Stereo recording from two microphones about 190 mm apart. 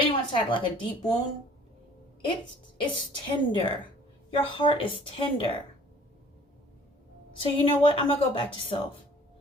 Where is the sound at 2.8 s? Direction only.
25° left (ahead or behind).